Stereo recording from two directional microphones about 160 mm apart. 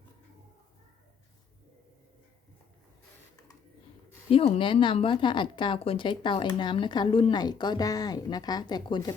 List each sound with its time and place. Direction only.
4.3 s a woman's voice: 35° left (ahead or behind)